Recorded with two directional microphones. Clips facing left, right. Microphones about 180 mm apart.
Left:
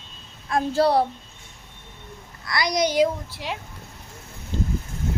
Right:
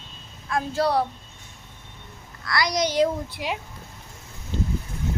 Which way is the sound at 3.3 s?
15° right (ahead or behind).